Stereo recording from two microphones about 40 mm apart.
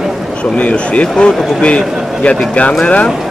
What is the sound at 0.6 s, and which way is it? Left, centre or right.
A man's voice, left.